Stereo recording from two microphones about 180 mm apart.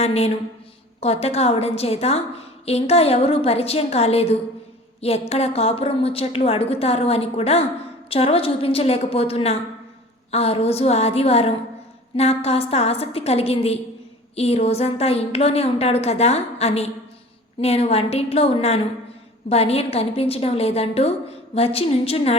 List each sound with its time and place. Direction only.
0.0 s a woman's voice: 35° left (ahead or behind)